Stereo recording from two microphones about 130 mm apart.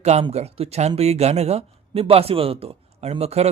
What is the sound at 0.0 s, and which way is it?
Speech, 55° right (ahead or behind).